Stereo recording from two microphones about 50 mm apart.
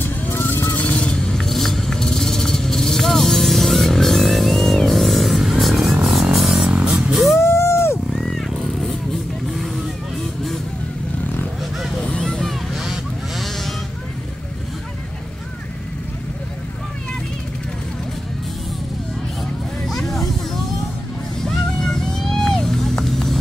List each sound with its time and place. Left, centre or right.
0.0 s vehicle: left
0.8 s vehicle: centre
6.0 s music: centre
7.3 s a sound: left
8.2 s a sound: centre
12.2 s vehicle: centre
12.7 s honk: centre
19.9 s vehicle: centre
21.5 s cat: centre